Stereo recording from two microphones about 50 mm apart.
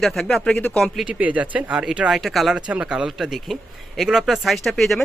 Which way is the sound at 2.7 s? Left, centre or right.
Right.